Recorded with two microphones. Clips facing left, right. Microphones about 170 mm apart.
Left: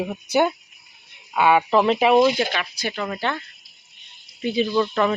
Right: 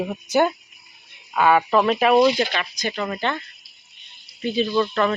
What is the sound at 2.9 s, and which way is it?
Mechanisms, 5° right (ahead or behind).